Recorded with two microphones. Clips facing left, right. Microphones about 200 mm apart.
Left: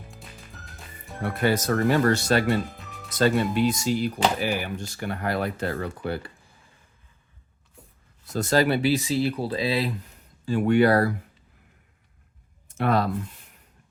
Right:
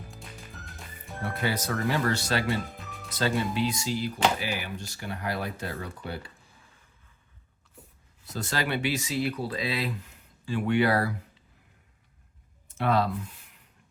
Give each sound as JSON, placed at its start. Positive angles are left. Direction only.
{"t": 0.1, "sound": "music", "side_deg": 0}
{"t": 1.4, "sound": "speech", "side_deg": 50}
{"t": 2.6, "sound": "music", "side_deg": 0}
{"t": 3.1, "sound": "speech", "side_deg": 50}
{"t": 8.3, "sound": "speech", "side_deg": 45}
{"t": 10.4, "sound": "speech", "side_deg": 45}
{"t": 12.6, "sound": "a sound", "side_deg": 50}